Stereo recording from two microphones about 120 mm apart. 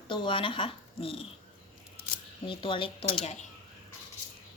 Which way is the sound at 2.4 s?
45° left (ahead or behind).